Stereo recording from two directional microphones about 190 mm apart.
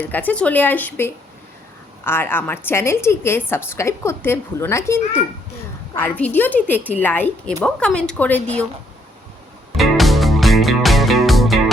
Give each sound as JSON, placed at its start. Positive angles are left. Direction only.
{"t": 0.0, "sound": "a woman's voice", "side_deg": 10}
{"t": 9.7, "sound": "music", "side_deg": 0}